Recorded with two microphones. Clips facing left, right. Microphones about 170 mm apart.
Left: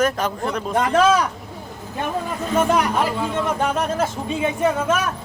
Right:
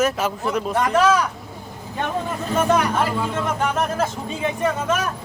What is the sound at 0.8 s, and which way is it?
Speech, 25° left (ahead or behind).